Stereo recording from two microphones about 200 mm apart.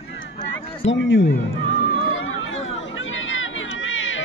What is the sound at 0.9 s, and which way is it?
Speech, 65° left (ahead or behind).